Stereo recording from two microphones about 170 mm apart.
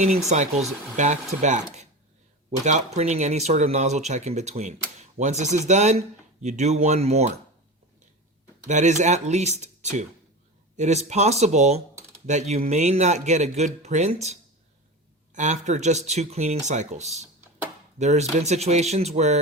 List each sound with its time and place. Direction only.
0.3 s speech: 40° right (ahead or behind)
2.6 s speech: 45° right (ahead or behind)
8.6 s speech: 45° right (ahead or behind)
15.3 s a sound: 45° right (ahead or behind)
15.6 s speech: 45° right (ahead or behind)